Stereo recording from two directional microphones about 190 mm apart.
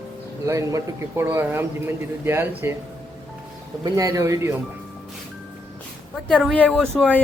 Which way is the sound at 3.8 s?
20° right (ahead or behind).